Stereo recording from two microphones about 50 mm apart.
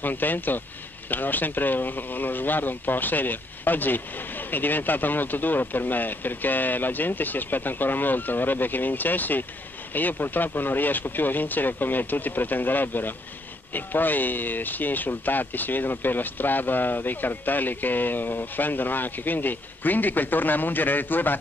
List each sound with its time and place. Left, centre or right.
0.0 s speech: left